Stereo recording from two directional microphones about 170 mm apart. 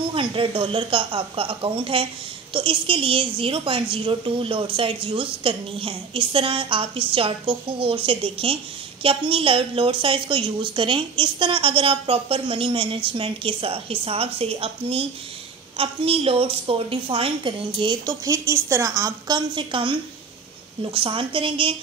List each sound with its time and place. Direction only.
0.1 s a woman's voice: 30° right (ahead or behind)